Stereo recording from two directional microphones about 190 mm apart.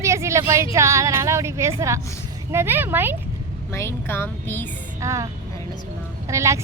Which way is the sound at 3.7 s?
15° left (ahead or behind).